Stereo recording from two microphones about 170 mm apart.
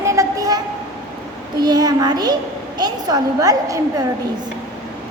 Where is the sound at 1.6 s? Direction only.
25° right (ahead or behind).